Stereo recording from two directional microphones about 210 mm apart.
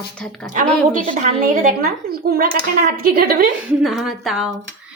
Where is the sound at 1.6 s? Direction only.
45° right (ahead or behind).